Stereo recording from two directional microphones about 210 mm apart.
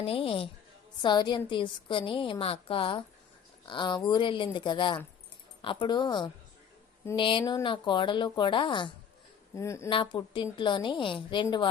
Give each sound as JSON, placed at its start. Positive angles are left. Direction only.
{"t": 0.0, "sound": "a woman's voice", "side_deg": 25}
{"t": 9.9, "sound": "a woman's voice", "side_deg": 25}